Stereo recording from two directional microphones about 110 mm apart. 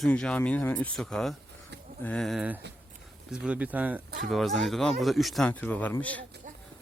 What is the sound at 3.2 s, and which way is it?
Speech, 5° right (ahead or behind).